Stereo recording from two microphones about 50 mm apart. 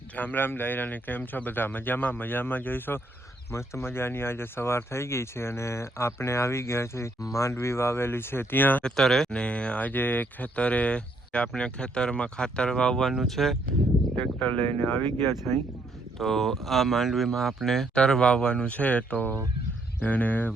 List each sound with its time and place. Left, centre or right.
0.2 s speech: left
3.5 s speech: left
8.8 s speech: centre
9.3 s speech: left
9.9 s speech: left; by 13.6 s centre
14.2 s speech: left
16.1 s speech: centre
17.9 s speech: centre; by 20.5 s left